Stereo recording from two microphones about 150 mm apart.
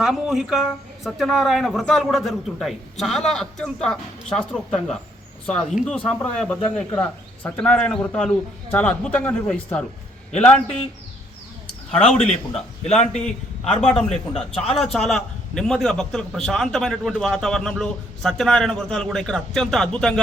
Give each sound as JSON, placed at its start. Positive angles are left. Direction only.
{"t": 0.0, "sound": "a man's voice", "side_deg": -5}
{"t": 11.9, "sound": "a man's voice", "side_deg": 45}
{"t": 13.8, "sound": "a man's voice", "side_deg": 5}